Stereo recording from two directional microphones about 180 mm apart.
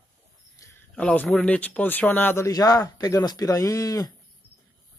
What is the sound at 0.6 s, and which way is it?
Speech, 10° left (ahead or behind).